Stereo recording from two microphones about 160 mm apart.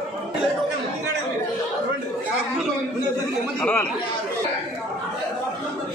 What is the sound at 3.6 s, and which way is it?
Speech, 10° left (ahead or behind).